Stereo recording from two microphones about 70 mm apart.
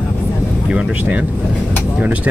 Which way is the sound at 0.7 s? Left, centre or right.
Centre.